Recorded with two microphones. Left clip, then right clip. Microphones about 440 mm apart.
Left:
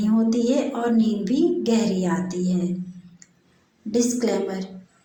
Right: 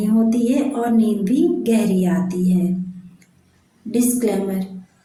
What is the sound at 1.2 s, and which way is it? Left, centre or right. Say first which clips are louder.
A woman's voice: right 3 dB; right.